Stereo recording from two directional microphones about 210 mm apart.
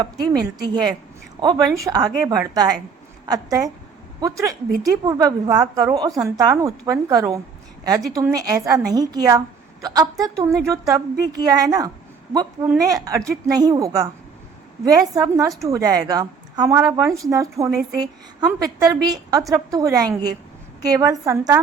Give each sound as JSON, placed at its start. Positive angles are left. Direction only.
{"t": 0.0, "sound": "a woman's voice", "side_deg": -20}
{"t": 19.0, "sound": "a woman's voice", "side_deg": -20}